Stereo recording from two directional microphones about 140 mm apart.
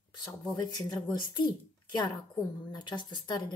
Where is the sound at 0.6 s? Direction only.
30° left (ahead or behind).